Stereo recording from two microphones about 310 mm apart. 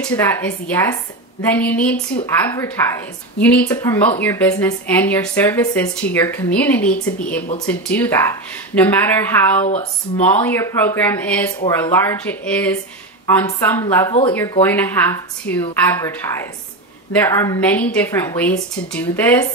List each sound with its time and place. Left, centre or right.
0.0 s speech: centre
9.7 s speech: left
10.2 s speech: centre